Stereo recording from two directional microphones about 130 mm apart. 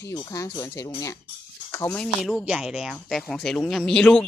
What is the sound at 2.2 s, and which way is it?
Speech, centre (ahead or behind).